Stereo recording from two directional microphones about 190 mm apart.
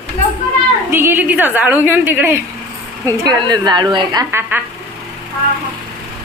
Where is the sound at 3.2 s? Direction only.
20° right (ahead or behind).